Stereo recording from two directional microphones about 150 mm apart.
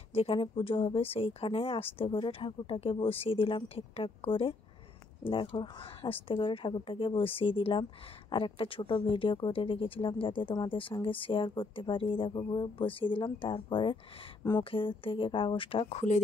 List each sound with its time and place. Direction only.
0.1 s speech: 40° left (ahead or behind)